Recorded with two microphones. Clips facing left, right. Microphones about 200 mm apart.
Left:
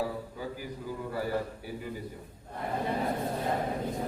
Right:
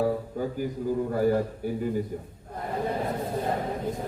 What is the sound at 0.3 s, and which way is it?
A man's voice, 50° right (ahead or behind).